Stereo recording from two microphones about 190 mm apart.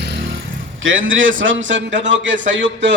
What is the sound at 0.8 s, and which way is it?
A man's voice, 90° right.